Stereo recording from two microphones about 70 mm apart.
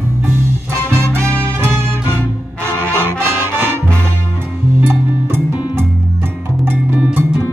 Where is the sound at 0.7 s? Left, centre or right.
Right.